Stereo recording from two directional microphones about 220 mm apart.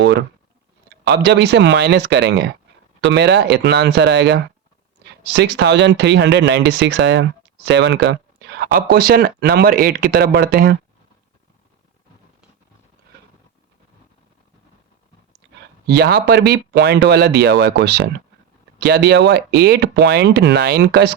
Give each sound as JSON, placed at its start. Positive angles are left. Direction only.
{"t": 0.0, "sound": "clicking", "side_deg": -50}
{"t": 0.9, "sound": "speech", "side_deg": -50}
{"t": 15.9, "sound": "speech", "side_deg": -45}